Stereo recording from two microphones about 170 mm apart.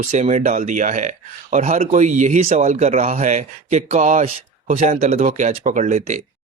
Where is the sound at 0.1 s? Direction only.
40° right (ahead or behind).